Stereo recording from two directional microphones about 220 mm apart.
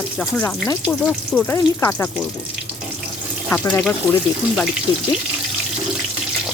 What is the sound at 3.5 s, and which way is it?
Speech, 5° left (ahead or behind).